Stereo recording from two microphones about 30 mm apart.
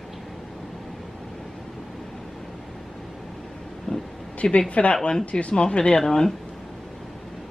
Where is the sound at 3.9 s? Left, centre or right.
Left.